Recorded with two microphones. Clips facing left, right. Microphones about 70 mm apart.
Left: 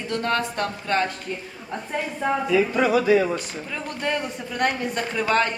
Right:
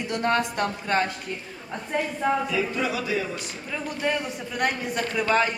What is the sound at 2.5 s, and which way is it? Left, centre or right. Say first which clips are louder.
Music: left 7 dB; left.